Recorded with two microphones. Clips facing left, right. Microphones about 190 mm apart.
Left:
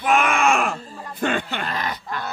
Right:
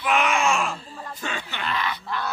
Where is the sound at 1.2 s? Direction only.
55° left (ahead or behind).